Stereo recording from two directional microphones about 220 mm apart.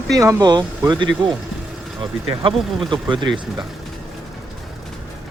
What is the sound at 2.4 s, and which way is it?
Speech, 20° right (ahead or behind).